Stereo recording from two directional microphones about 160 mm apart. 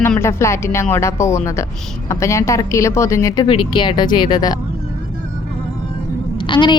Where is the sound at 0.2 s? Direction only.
15° left (ahead or behind).